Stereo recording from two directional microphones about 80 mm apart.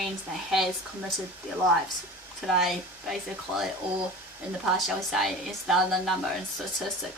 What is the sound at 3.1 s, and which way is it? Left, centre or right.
Speech, centre.